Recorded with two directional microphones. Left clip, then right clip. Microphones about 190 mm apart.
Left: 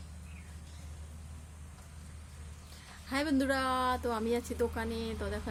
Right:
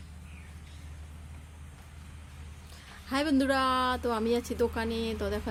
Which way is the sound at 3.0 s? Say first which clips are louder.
Right 4 dB; 25° right (ahead or behind).